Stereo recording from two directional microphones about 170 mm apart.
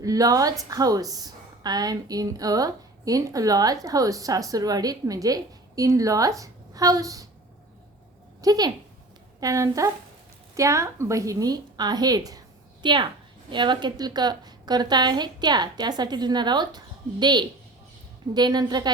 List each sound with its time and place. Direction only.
0.0 s a woman's voice: 20° right (ahead or behind)
8.4 s a woman's voice: 20° right (ahead or behind)